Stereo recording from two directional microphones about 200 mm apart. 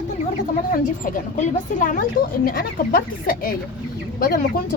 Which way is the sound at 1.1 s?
40° left (ahead or behind).